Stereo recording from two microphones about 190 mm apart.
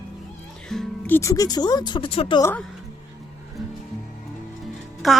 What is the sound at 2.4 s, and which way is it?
Speech, 10° left (ahead or behind).